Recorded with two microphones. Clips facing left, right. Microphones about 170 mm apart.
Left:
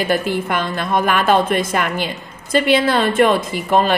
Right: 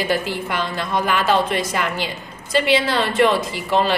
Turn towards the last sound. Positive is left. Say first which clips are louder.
# left 3 dB
turn(degrees=50)  # may be behind; listen again after turning